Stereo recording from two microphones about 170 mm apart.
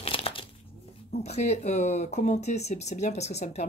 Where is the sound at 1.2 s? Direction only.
40° left (ahead or behind).